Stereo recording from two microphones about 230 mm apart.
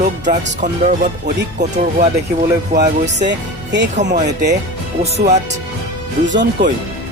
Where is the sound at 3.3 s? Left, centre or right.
Right.